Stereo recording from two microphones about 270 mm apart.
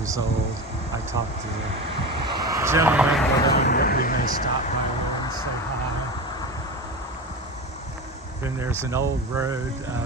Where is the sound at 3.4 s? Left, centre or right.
Left.